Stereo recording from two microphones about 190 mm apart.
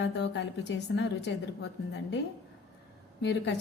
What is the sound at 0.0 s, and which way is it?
A woman's voice, 65° left (ahead or behind).